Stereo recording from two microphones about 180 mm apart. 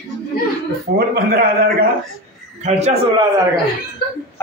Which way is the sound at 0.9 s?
60° right (ahead or behind).